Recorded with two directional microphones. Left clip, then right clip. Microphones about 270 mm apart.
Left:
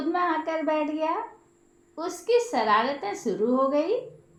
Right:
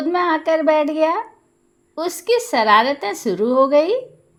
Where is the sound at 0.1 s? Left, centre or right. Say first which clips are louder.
Right 8 dB; right.